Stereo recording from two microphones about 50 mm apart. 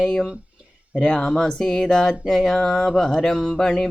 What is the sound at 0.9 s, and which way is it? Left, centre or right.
Speech, centre.